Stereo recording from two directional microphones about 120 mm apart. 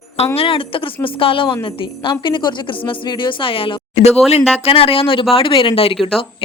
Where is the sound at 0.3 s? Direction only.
50° left (ahead or behind).